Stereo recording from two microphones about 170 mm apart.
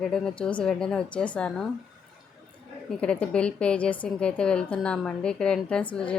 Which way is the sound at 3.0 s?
5° left (ahead or behind).